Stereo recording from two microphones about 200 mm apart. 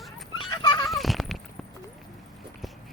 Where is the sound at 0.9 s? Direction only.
Centre (ahead or behind).